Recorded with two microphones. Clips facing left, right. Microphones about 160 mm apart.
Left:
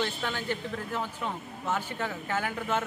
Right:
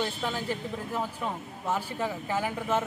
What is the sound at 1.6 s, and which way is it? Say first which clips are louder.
Speech: right 1 dB; 35° right (ahead or behind).